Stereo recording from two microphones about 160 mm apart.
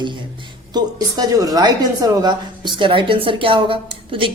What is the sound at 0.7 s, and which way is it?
A woman's voice, 25° right (ahead or behind).